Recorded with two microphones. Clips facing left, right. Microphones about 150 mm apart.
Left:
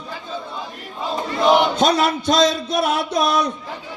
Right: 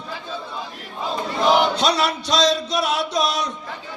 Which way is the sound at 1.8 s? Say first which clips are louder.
Left 3 dB; 50° left (ahead or behind).